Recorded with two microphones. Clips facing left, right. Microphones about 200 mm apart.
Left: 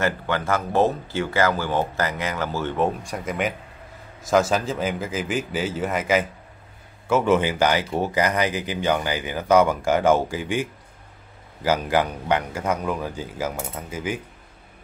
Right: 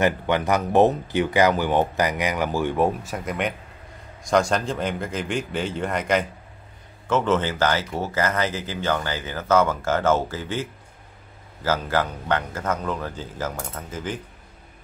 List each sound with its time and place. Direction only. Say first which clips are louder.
0.0 s speech: right 3 dB; 15° right (ahead or behind); by 14.2 s 10° left (ahead or behind)